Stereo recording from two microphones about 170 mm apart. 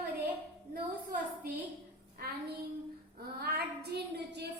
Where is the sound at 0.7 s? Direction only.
60° right (ahead or behind).